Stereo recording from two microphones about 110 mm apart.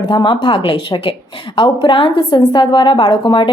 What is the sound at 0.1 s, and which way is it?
A woman's voice, 45° left (ahead or behind).